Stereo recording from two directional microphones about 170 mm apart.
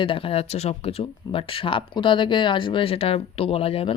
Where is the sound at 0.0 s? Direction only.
30° left (ahead or behind).